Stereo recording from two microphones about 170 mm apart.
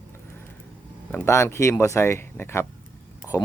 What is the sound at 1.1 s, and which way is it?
Speech, 15° left (ahead or behind).